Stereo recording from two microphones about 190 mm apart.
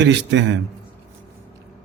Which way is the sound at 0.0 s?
70° right (ahead or behind).